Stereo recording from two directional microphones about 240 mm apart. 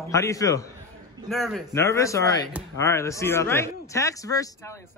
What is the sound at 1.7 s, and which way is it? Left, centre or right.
Speech, centre.